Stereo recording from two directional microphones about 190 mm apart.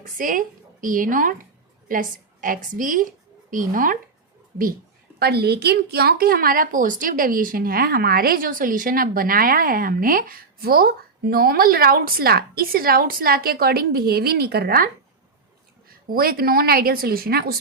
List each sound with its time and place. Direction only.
0.0 s a woman's voice: 45° right (ahead or behind)
5.2 s a woman's voice: 60° right (ahead or behind)
16.0 s a woman's voice: 50° right (ahead or behind)